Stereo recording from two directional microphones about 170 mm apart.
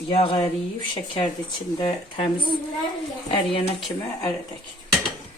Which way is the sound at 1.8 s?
30° left (ahead or behind).